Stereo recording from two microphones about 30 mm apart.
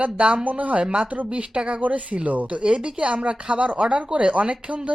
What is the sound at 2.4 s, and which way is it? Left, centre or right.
Speech, right.